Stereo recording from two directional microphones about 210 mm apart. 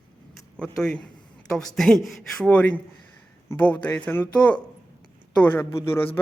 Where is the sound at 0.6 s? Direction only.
5° left (ahead or behind).